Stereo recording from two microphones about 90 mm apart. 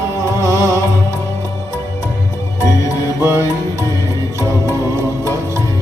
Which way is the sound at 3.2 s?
30° right (ahead or behind).